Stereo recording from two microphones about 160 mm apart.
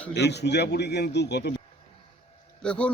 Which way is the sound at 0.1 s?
90° left.